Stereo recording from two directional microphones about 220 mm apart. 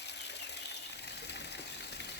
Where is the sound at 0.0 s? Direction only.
50° left (ahead or behind).